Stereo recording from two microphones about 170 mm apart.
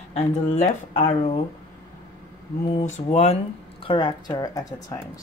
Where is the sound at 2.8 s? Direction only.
40° left (ahead or behind).